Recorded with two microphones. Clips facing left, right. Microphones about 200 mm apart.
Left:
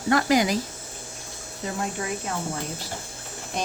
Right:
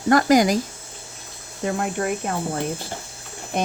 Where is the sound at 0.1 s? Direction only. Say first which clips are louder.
Right 5 dB; 45° right (ahead or behind).